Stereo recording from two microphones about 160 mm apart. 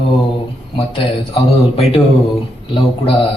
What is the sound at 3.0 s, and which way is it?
Speech, 35° left (ahead or behind).